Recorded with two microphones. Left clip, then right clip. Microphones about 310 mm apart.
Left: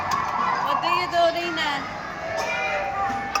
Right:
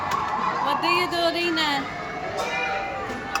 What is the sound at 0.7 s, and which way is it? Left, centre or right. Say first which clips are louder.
Dog: even; centre.